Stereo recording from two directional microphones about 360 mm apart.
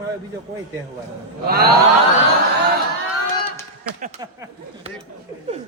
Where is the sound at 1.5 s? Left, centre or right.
Right.